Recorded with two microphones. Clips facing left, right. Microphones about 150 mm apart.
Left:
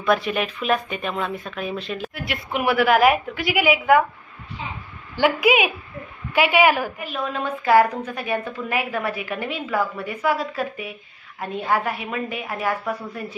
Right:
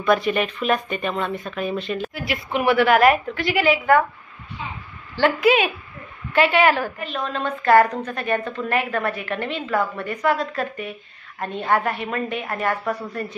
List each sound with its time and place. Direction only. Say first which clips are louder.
0.0 s speech: right 2 dB; centre (ahead or behind)
5.1 s a woman's voice: right 1 dB; 10° left (ahead or behind)